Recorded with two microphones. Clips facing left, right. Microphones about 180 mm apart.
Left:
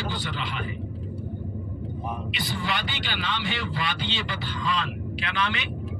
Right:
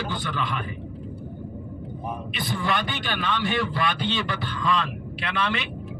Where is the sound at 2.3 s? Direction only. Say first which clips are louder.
Right 6 dB; 55° right (ahead or behind).